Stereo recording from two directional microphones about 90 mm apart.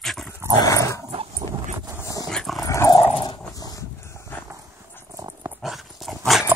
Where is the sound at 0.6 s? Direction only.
40° left (ahead or behind).